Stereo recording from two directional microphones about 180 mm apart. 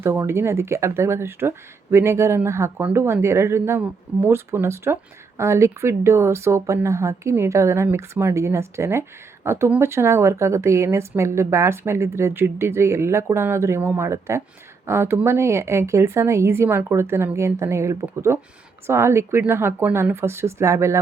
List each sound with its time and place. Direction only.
0.0 s speech: 15° right (ahead or behind)